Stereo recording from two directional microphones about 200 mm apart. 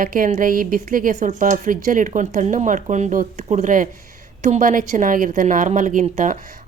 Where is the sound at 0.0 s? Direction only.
45° right (ahead or behind).